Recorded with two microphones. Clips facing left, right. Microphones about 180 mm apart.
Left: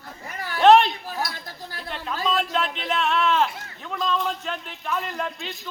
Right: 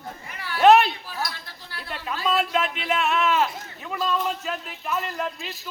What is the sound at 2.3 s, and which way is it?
A man's voice, 5° right (ahead or behind).